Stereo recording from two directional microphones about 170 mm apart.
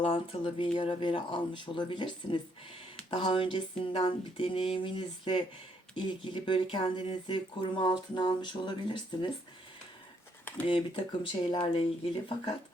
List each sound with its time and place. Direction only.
0.0 s speech: 30° left (ahead or behind)
10.7 s speech: 30° left (ahead or behind)